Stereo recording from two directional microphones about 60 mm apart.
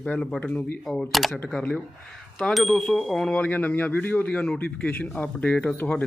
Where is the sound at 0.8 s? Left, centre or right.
Centre.